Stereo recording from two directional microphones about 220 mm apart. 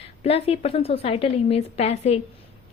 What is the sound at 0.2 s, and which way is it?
A woman's voice, 25° left (ahead or behind).